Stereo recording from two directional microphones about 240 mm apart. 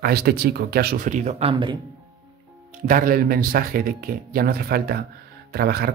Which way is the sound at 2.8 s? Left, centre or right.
Right.